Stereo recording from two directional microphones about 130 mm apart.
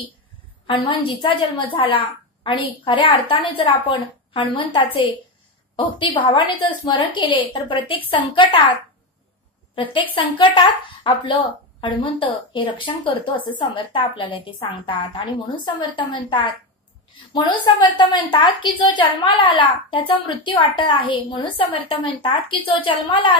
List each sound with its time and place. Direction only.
0.7 s a woman's voice: 40° left (ahead or behind)
9.8 s a woman's voice: 40° left (ahead or behind)